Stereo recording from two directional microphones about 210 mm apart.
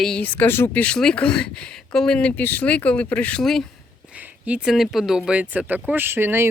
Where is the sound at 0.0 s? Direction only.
5° left (ahead or behind).